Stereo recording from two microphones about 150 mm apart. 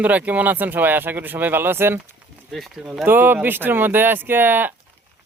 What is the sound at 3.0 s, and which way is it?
Speech, 15° right (ahead or behind).